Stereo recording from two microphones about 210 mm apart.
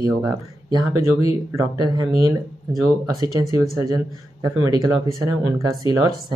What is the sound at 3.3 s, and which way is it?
Speech, 15° right (ahead or behind).